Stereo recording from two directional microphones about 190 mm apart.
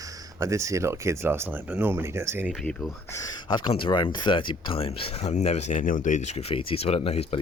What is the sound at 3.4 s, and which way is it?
Speech, 25° left (ahead or behind).